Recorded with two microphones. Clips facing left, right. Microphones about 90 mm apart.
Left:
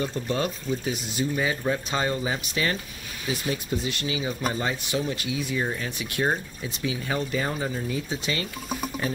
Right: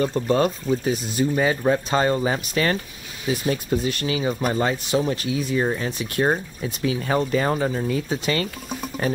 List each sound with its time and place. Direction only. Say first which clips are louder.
0.0 s speech: right 7 dB; 50° right (ahead or behind)
5.1 s speech: right 5 dB; 40° right (ahead or behind)
6.2 s speech: right 4 dB; 45° right (ahead or behind)
7.4 s speech: right 6 dB; 65° right (ahead or behind)